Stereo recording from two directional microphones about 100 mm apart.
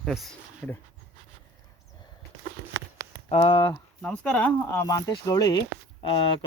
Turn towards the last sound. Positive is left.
turn(degrees=60)  # may be behind; listen again after turning